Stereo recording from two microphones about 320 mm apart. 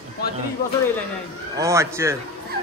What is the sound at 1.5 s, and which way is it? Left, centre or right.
Speech, centre.